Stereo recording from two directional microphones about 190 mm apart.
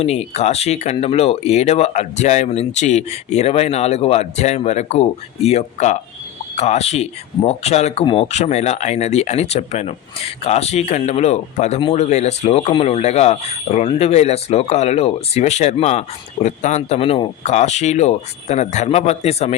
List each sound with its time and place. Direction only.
0.0 s speech: 35° left (ahead or behind)